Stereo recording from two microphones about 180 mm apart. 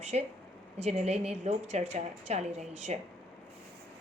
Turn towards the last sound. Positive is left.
turn(degrees=-40)  # may be behind; listen again after turning